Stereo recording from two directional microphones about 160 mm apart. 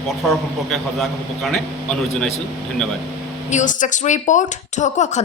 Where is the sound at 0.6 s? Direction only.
Centre (ahead or behind).